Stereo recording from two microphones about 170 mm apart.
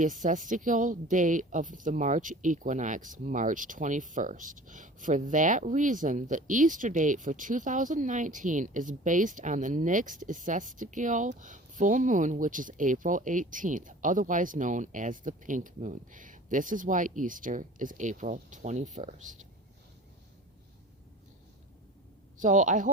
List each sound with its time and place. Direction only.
0.0 s speech: 50° right (ahead or behind)
22.4 s speech: 50° right (ahead or behind)